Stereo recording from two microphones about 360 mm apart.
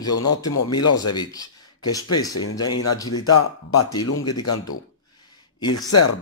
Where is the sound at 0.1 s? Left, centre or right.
Left.